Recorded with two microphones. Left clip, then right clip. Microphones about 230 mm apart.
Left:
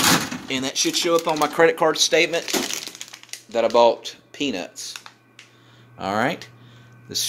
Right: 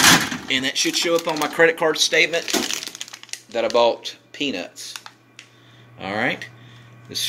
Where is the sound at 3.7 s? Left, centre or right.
Left.